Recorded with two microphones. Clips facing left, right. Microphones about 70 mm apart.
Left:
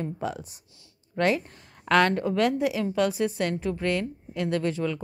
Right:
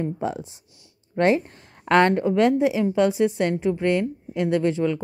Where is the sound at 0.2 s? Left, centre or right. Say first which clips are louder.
Right 4 dB; right.